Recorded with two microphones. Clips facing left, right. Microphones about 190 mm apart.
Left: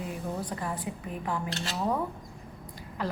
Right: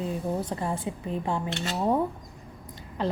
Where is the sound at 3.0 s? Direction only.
25° right (ahead or behind).